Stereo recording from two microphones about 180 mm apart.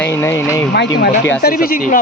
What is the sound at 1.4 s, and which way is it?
Speech, 55° left (ahead or behind).